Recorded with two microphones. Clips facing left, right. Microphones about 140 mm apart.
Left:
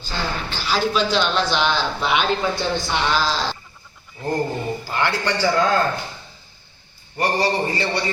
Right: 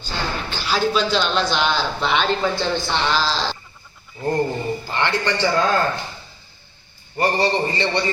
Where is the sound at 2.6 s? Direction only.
10° left (ahead or behind).